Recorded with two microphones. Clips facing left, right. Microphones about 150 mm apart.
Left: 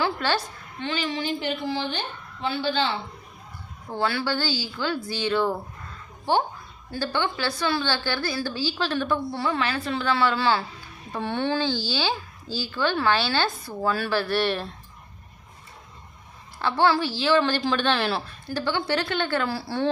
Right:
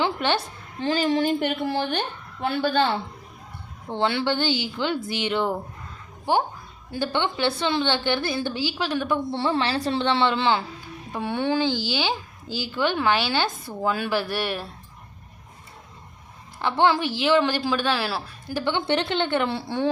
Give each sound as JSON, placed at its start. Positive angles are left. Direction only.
{"t": 0.0, "sound": "a sound", "side_deg": -20}
{"t": 0.8, "sound": "a woman's voice", "side_deg": -40}
{"t": 3.8, "sound": "a woman's voice", "side_deg": -25}
{"t": 16.6, "sound": "a woman's voice", "side_deg": -20}